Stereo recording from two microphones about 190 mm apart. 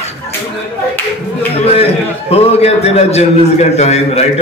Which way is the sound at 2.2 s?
30° left (ahead or behind).